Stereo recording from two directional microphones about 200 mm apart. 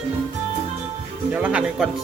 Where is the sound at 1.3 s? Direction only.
5° right (ahead or behind).